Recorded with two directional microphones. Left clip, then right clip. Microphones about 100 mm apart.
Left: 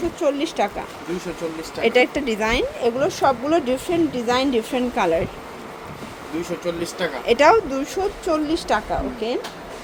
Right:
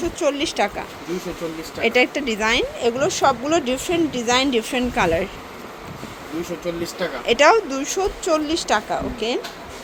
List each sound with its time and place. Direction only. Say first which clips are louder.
0.2 s speech: right 1 dB; 5° right (ahead or behind)
1.8 s speech: left 1 dB; 15° left (ahead or behind); by 5.3 s centre (ahead or behind)
6.7 s speech: even; 15° left (ahead or behind); by 9.4 s 5° right (ahead or behind)